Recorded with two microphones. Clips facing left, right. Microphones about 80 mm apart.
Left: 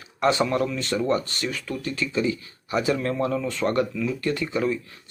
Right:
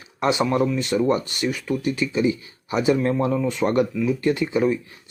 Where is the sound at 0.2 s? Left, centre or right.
Centre.